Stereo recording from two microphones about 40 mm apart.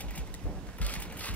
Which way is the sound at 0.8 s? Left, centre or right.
Left.